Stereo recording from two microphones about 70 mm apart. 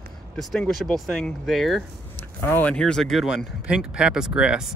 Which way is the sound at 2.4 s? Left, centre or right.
Left.